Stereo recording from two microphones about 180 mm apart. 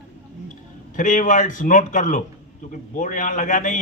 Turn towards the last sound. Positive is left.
turn(degrees=45)  # may be behind; listen again after turning